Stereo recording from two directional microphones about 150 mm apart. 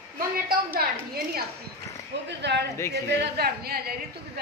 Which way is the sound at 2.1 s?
90° right.